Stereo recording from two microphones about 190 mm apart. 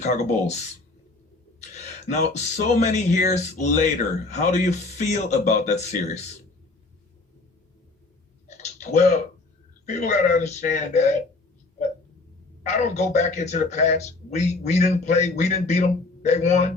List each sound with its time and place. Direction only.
0.0 s speech: 35° left (ahead or behind)
2.0 s speech: 40° left (ahead or behind)
8.4 s typing: 40° left (ahead or behind)
9.8 s speech: 40° left (ahead or behind)
12.6 s speech: 35° left (ahead or behind)